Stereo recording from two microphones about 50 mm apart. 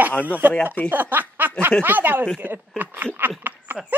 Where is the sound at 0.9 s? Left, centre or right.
Right.